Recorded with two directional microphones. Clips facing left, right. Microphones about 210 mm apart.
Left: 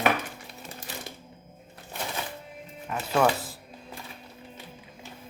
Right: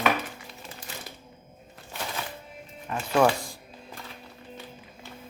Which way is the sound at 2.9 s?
5° left (ahead or behind).